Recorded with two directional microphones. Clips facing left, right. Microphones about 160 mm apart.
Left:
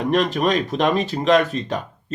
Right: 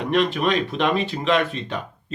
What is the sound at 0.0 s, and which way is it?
Speech, 40° left (ahead or behind).